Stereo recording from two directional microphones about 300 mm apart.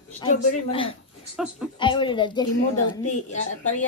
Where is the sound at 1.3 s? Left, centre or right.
Centre.